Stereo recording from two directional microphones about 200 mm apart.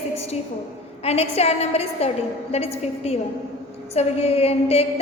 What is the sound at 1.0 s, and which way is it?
A woman's voice, 30° left (ahead or behind).